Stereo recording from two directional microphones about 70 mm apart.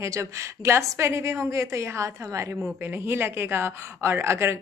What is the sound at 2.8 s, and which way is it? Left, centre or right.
A woman's voice, right.